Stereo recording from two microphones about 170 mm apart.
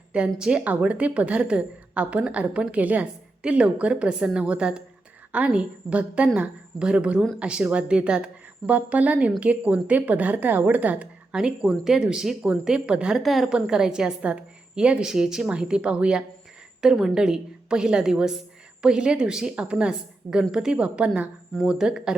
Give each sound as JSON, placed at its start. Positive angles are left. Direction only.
{"t": 0.3, "sound": "a woman's voice", "side_deg": -5}